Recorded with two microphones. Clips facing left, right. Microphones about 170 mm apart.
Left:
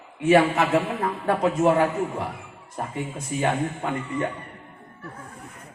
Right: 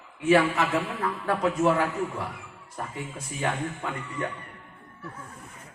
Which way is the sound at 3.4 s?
35° left (ahead or behind).